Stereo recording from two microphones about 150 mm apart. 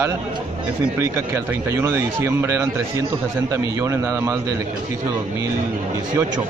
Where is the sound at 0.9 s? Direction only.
15° right (ahead or behind).